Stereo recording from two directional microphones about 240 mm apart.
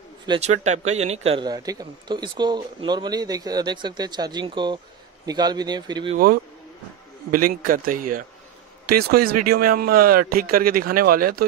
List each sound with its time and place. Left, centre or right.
0.3 s a man's voice: right
7.2 s a man's voice: right